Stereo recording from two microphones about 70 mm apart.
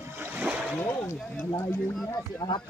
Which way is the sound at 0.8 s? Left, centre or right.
Left.